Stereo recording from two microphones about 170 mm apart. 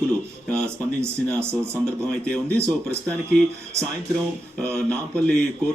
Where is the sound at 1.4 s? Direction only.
15° right (ahead or behind).